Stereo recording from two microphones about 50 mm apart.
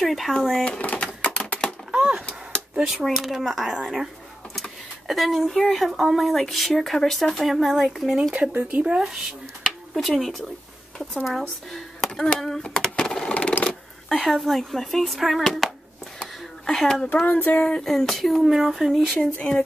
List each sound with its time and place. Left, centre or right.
0.0 s speech: centre
0.7 s typewriter: left
1.9 s a sound: centre
2.8 s speech: centre
8.4 s speech: right
8.8 s speech: centre
11.7 s a sound: centre
12.4 s speech: centre
12.6 s a sound: centre
13.7 s speech: centre
16.2 s a sound: centre
17.3 s speech: left
17.8 s speech: centre
18.5 s speech: centre